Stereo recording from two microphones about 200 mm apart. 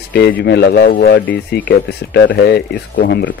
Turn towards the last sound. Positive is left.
turn(degrees=50)  # may be behind; listen again after turning